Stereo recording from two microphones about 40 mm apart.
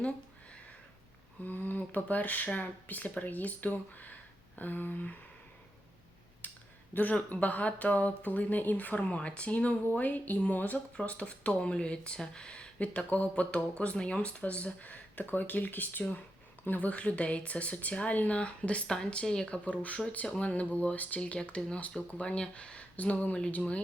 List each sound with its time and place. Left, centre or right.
1.5 s speech: left
6.4 s a sound: left
6.9 s speech: left
10.5 s speech: left
10.9 s speech: left
16.6 s speech: left
18.9 s speech: centre
19.6 s speech: left
21.2 s speech: left